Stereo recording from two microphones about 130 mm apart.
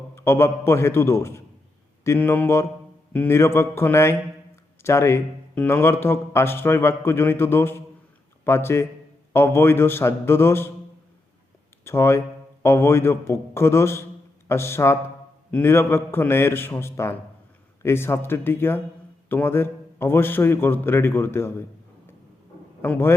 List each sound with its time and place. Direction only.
0.2 s a man's voice: 20° left (ahead or behind)
11.9 s a man's voice: 20° left (ahead or behind)
22.8 s a man's voice: 20° left (ahead or behind)